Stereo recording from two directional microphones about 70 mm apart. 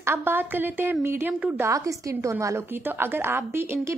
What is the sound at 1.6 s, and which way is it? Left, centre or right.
Speech, right.